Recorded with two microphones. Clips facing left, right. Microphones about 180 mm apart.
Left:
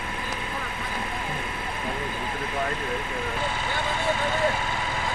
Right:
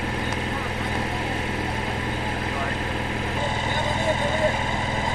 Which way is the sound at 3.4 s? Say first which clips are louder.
Right 3 dB; 35° right (ahead or behind).